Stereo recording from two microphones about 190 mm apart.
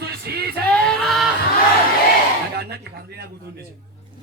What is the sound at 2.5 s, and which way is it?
Speech, 60° right (ahead or behind).